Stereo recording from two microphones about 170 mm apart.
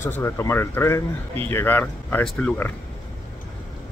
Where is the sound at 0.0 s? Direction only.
15° left (ahead or behind).